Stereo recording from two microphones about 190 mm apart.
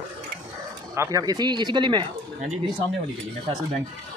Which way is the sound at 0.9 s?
15° right (ahead or behind).